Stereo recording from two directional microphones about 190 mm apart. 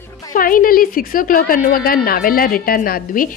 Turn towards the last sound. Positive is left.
turn(degrees=45)  # may be behind; listen again after turning